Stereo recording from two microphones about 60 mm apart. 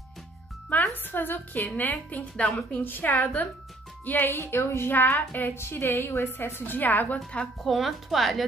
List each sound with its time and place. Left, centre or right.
0.7 s a woman's voice: left
7.6 s a woman's voice: centre